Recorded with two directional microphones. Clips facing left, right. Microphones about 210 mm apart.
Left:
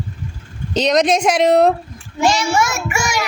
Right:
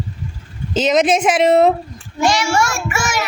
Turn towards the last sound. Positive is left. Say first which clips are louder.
# even
turn(degrees=15)  # may be behind; listen again after turning